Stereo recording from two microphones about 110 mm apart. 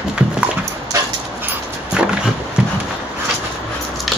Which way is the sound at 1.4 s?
10° right (ahead or behind).